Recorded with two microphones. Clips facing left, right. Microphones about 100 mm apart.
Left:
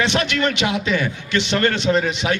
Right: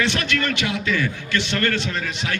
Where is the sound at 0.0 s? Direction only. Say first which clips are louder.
Left 3 dB; 20° left (ahead or behind).